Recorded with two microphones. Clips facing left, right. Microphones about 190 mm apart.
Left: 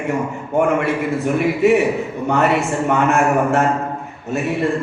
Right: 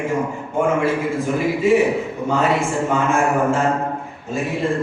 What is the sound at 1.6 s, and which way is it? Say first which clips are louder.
A man's voice: left 1 dB; 65° left (ahead or behind).